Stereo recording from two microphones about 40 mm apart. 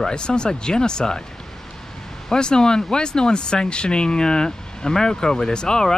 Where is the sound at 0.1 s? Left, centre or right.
Left.